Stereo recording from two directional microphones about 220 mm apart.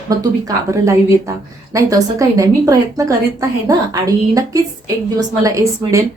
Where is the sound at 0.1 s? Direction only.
15° right (ahead or behind).